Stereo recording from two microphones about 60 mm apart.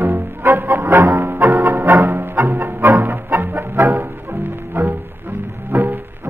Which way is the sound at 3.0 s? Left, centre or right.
Right.